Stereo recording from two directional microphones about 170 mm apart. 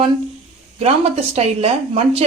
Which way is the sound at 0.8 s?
40° right (ahead or behind).